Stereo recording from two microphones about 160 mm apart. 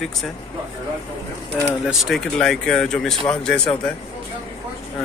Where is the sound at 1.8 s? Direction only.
Centre (ahead or behind).